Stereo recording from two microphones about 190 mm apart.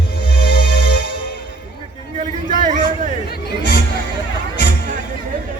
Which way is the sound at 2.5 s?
40° right (ahead or behind).